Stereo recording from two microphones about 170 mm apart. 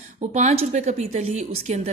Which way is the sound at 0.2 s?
40° right (ahead or behind).